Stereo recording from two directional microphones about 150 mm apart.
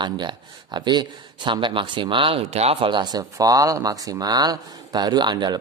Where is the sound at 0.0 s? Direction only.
30° right (ahead or behind).